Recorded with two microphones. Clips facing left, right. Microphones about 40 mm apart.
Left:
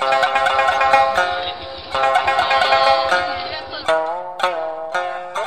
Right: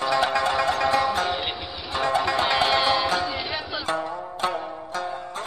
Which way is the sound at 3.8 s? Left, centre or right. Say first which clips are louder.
Left 13 dB; left.